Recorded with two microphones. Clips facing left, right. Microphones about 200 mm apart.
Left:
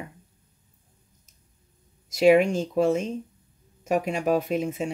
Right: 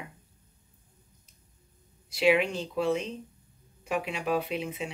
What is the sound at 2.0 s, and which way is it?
Speech, 45° left (ahead or behind).